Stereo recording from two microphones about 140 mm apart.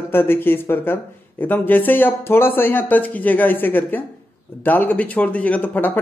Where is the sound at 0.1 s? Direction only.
15° left (ahead or behind).